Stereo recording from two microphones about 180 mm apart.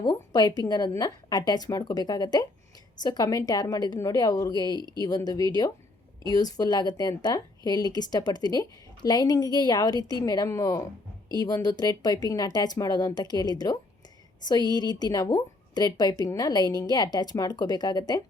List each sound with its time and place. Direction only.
0.0 s a woman's voice: 25° left (ahead or behind)